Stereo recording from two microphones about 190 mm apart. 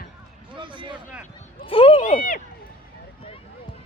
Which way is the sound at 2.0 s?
45° left (ahead or behind).